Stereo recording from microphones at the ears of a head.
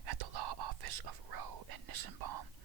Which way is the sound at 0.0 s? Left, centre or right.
Right.